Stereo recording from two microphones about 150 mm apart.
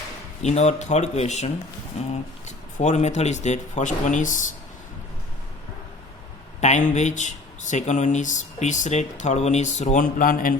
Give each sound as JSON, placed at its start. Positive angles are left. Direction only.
{"t": 0.4, "sound": "speech", "side_deg": 45}
{"t": 2.7, "sound": "speech", "side_deg": 50}
{"t": 6.6, "sound": "speech", "side_deg": 55}